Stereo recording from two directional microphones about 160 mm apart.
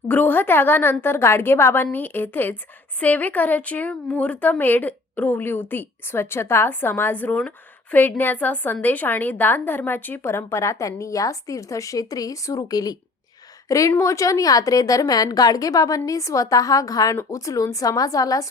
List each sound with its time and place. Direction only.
0.1 s a woman's voice: 10° left (ahead or behind)